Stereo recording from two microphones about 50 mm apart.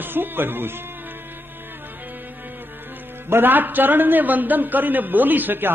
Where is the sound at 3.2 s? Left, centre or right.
Right.